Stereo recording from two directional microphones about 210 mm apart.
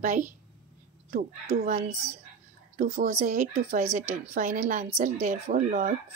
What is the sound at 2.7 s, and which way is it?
A woman's voice, 35° right (ahead or behind).